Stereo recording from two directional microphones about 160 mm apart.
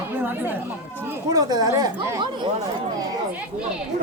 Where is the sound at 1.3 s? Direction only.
25° right (ahead or behind).